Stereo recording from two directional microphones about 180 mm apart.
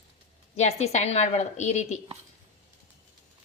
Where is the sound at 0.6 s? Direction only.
35° left (ahead or behind).